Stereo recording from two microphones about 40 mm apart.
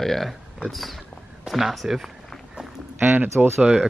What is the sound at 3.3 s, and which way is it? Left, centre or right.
Speech, centre.